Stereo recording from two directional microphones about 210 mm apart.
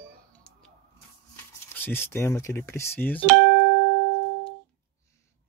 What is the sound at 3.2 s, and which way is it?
Speech, 55° right (ahead or behind).